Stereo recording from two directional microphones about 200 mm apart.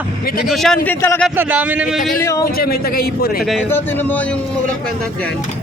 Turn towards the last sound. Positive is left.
turn(degrees=0)  # may be behind; listen again after turning